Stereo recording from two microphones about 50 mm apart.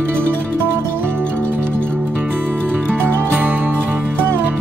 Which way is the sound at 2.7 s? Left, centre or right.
Right.